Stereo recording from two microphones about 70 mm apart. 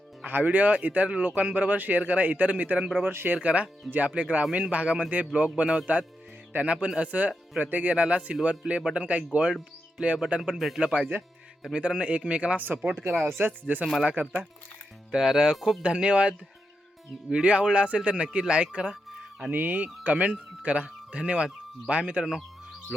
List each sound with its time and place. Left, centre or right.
0.3 s a man's voice: right
3.0 s speech: right
3.3 s a man's voice: centre
10.5 s speech: centre
10.8 s speech: centre
13.0 s speech: centre
13.2 s a man's voice: right; by 18.9 s centre
18.9 s music: centre
19.5 s speech: right
22.9 s music: centre